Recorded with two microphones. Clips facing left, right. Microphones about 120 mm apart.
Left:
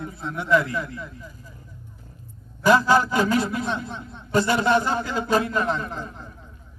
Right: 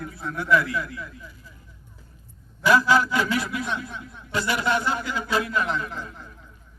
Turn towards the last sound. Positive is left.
turn(degrees=35)  # may be behind; listen again after turning